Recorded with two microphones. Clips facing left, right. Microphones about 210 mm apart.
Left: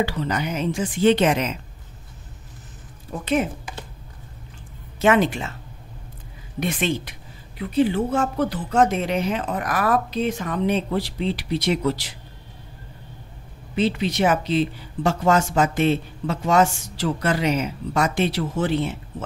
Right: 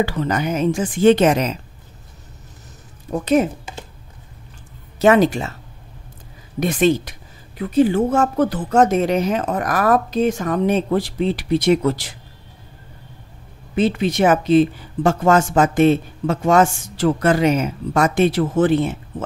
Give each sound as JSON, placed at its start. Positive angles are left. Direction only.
{"t": 0.0, "sound": "speech", "side_deg": -50}
{"t": 3.1, "sound": "speech", "side_deg": -40}
{"t": 4.9, "sound": "speech", "side_deg": -40}
{"t": 6.6, "sound": "speech", "side_deg": -40}
{"t": 13.7, "sound": "speech", "side_deg": -50}